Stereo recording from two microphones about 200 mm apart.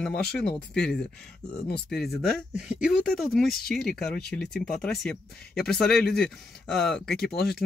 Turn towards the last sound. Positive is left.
turn(degrees=50)  # may be behind; listen again after turning